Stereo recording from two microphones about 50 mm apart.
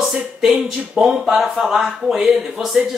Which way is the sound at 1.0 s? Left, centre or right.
Centre.